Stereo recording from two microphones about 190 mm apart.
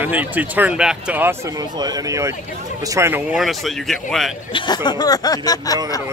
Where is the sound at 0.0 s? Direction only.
10° right (ahead or behind).